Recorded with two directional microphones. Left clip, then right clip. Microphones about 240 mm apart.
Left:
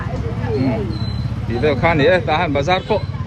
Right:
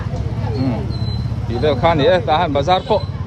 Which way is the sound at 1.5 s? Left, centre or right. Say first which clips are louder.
Right 1 dB; centre.